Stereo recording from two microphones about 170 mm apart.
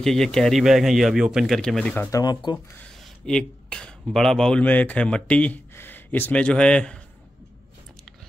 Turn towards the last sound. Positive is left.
turn(degrees=5)  # may be behind; listen again after turning